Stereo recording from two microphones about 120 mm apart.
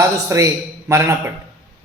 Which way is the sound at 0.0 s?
25° right (ahead or behind).